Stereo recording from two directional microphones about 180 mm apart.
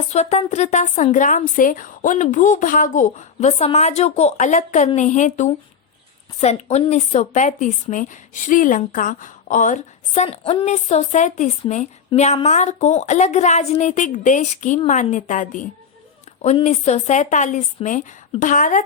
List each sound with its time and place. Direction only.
0.1 s a woman's voice: 35° left (ahead or behind)